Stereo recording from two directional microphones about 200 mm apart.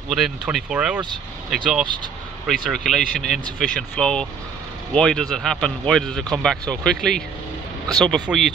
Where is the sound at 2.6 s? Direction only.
Centre (ahead or behind).